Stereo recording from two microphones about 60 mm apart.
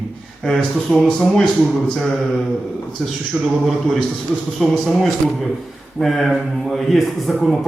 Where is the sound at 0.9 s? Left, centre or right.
Centre.